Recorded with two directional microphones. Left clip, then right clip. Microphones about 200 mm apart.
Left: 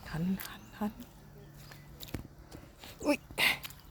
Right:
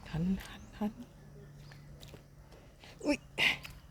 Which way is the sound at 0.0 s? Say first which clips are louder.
Left 1 dB; 15° right (ahead or behind).